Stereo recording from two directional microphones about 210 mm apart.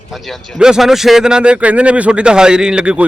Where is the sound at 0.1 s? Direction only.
Centre (ahead or behind).